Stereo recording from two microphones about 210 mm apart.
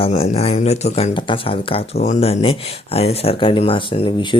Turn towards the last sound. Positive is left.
turn(degrees=25)  # may be behind; listen again after turning